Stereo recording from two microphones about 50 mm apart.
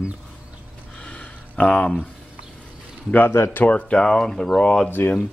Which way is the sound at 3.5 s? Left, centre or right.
Left.